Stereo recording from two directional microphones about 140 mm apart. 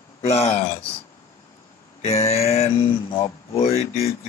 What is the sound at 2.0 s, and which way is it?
Mantra, 45° left (ahead or behind).